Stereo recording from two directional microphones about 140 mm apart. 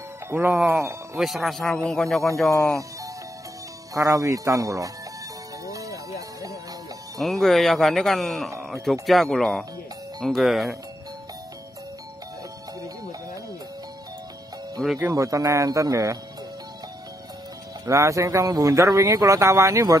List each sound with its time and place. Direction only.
0.3 s speech: 15° right (ahead or behind)
1.2 s speech: centre (ahead or behind)
3.9 s a man's voice: 25° right (ahead or behind)
5.7 s music: 25° right (ahead or behind)
7.2 s speech: centre (ahead or behind)
15.0 s a man's voice: 20° right (ahead or behind)
17.8 s a man's voice: 20° right (ahead or behind)